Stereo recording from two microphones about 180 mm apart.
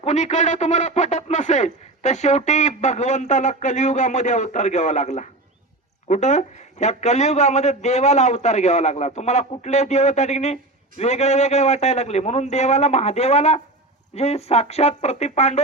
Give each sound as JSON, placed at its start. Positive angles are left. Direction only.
{"t": 0.0, "sound": "speech", "side_deg": 40}